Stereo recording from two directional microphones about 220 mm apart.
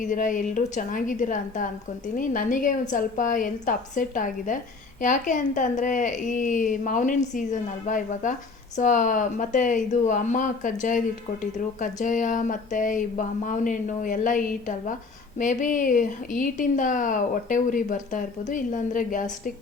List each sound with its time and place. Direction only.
0.0 s a woman's voice: 35° left (ahead or behind)